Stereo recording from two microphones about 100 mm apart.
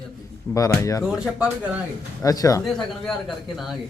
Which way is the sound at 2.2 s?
35° left (ahead or behind).